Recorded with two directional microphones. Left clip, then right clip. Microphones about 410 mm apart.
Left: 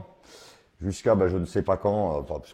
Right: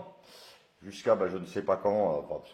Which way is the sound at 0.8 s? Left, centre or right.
Left.